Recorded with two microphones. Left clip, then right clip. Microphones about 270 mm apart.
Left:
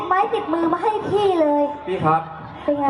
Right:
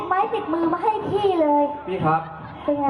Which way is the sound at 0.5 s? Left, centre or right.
Centre.